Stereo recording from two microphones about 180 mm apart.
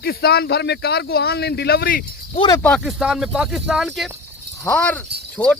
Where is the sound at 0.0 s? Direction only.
60° left (ahead or behind).